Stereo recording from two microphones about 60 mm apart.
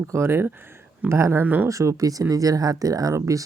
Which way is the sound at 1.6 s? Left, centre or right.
Right.